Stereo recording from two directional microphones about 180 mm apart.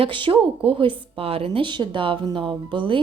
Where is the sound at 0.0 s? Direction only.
25° right (ahead or behind).